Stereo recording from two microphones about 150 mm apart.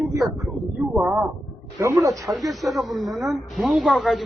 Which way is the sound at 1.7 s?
20° right (ahead or behind).